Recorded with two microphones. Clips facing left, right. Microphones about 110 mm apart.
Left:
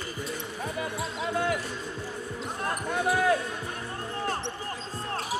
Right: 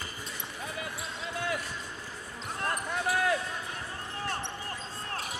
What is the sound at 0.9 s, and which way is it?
Basketball bounce, 40° left (ahead or behind).